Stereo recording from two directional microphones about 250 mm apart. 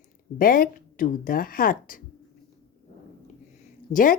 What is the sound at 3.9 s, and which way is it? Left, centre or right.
Speech, left.